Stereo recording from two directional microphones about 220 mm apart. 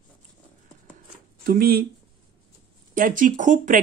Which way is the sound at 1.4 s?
40° right (ahead or behind).